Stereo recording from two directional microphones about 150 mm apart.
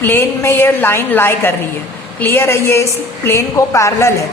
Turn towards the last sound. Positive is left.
turn(degrees=20)  # may be behind; listen again after turning